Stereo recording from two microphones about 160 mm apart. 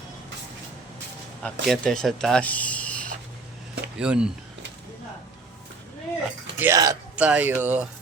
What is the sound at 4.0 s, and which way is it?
Speech, 5° right (ahead or behind).